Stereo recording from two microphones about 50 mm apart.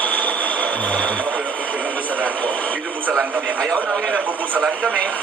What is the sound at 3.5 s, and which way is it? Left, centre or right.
Speech, centre.